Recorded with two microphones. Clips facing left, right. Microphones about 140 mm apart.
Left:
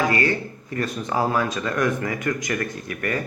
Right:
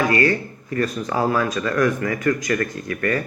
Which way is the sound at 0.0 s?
20° left (ahead or behind).